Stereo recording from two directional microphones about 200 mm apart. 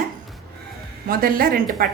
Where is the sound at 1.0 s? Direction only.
45° right (ahead or behind).